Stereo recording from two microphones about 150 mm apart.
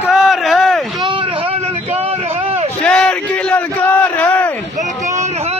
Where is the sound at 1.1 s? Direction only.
35° right (ahead or behind).